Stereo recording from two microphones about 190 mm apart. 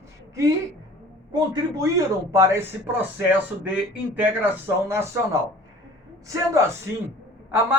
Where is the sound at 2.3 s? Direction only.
15° right (ahead or behind).